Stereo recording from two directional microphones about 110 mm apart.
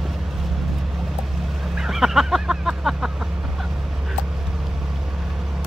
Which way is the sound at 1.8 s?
5° right (ahead or behind).